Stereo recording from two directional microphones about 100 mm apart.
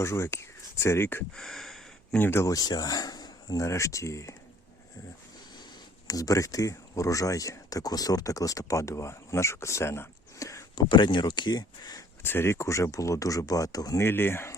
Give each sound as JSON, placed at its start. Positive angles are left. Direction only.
{"t": 0.0, "sound": "speech", "side_deg": 30}
{"t": 1.4, "sound": "a sound", "side_deg": 0}
{"t": 2.1, "sound": "speech", "side_deg": 20}
{"t": 6.1, "sound": "speech", "side_deg": 35}
{"t": 10.8, "sound": "speech", "side_deg": 50}
{"t": 12.2, "sound": "speech", "side_deg": 25}
{"t": 14.0, "sound": "speech", "side_deg": 20}